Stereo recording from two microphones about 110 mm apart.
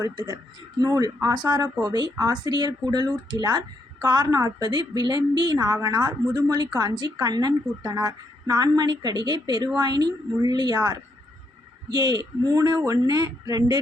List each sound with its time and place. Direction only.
0.0 s a woman's voice: 40° right (ahead or behind)
11.9 s a woman's voice: 40° right (ahead or behind)